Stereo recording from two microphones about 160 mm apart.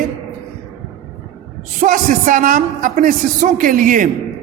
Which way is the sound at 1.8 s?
55° right (ahead or behind).